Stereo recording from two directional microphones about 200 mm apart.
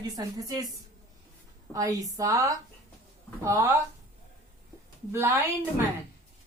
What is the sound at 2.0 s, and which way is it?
A woman's voice, 15° right (ahead or behind).